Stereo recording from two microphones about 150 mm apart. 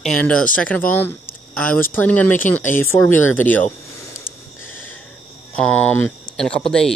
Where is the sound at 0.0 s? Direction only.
5° left (ahead or behind).